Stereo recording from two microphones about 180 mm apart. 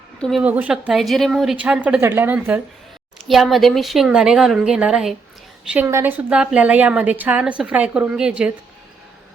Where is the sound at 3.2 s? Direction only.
Centre (ahead or behind).